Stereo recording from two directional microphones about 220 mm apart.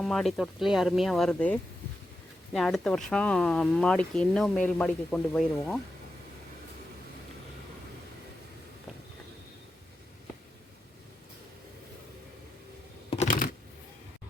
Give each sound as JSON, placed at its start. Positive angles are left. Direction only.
{"t": 0.0, "sound": "speech", "side_deg": 0}
{"t": 13.1, "sound": "computer keyboard", "side_deg": 35}